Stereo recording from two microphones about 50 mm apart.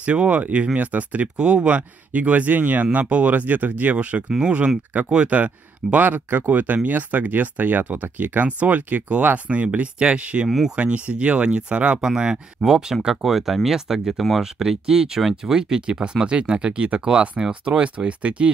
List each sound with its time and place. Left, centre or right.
0.0 s speech: right
4.3 s speech: centre